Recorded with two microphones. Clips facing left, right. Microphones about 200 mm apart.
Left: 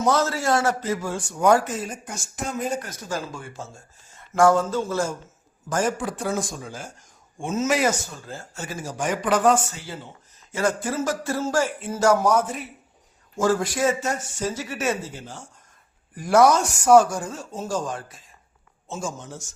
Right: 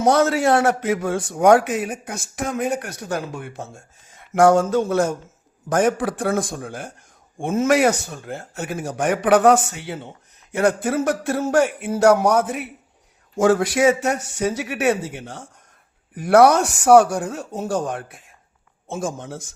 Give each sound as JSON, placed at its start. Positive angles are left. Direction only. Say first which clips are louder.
{"t": 0.0, "sound": "a man's voice", "louder": "right 5 dB", "side_deg": -65}